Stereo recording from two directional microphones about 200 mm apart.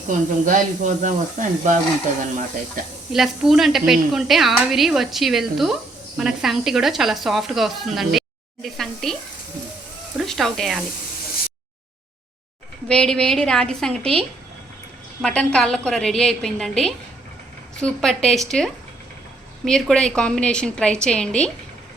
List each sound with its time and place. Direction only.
0.1 s speech: 40° right (ahead or behind)
3.1 s speech: centre (ahead or behind)
10.2 s speech: centre (ahead or behind)
12.9 s speech: 5° left (ahead or behind)
15.2 s speech: 5° left (ahead or behind)